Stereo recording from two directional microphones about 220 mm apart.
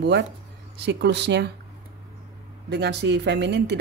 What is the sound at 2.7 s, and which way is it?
Speech, 50° right (ahead or behind).